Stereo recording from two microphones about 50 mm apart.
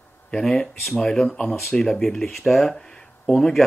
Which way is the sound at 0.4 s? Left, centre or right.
Centre.